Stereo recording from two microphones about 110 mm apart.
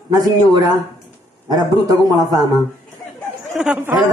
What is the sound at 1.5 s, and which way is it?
Speech, 35° right (ahead or behind).